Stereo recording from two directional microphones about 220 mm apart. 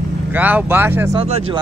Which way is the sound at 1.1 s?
25° right (ahead or behind).